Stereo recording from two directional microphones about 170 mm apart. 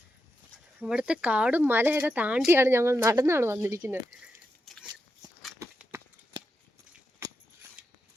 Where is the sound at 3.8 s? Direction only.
5° right (ahead or behind).